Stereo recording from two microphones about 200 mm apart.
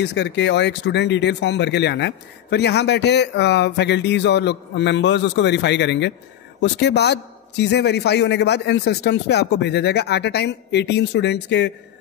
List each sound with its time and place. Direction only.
0.0 s speech: 60° left (ahead or behind)